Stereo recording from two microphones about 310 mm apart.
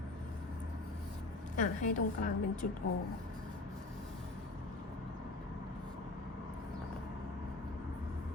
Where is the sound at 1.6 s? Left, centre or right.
Left.